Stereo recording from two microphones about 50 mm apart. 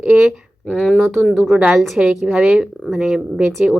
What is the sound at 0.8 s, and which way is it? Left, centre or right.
Speech, centre.